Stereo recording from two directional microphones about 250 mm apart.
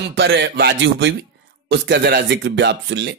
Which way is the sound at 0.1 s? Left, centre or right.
Right.